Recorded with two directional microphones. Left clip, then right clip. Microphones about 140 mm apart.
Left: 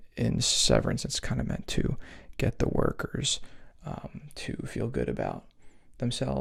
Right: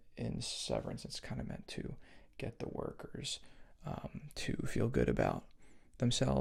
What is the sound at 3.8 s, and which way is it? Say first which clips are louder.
Speech: left 5 dB; centre (ahead or behind).